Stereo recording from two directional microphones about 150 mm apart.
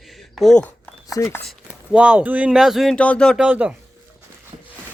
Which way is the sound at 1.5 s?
5° right (ahead or behind).